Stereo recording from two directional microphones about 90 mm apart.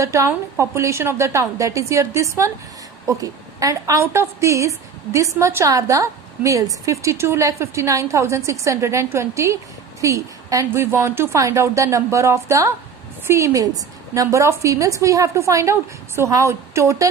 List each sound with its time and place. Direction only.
0.0 s a woman's voice: 35° right (ahead or behind)